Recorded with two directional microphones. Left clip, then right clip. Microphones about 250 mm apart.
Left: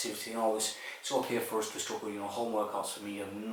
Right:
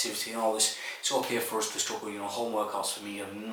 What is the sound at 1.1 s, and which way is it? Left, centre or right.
Speech, centre.